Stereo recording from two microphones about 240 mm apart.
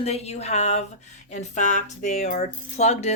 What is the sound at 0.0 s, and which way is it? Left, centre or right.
Speech, left.